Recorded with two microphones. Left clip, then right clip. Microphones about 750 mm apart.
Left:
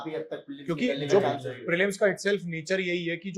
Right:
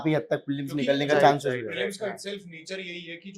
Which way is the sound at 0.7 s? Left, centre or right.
Left.